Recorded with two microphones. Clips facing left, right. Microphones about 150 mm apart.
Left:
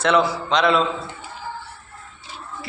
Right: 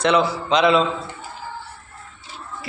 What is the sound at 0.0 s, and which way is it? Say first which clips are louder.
Speech: even; centre (ahead or behind).